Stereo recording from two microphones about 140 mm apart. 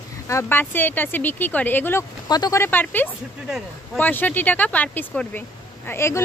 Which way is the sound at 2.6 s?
15° left (ahead or behind).